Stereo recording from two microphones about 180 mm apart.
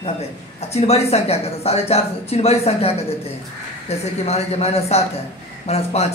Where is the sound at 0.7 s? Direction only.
35° left (ahead or behind).